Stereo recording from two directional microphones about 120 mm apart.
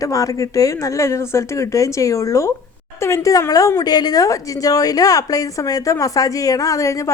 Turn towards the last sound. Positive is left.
turn(degrees=25)  # may be behind; listen again after turning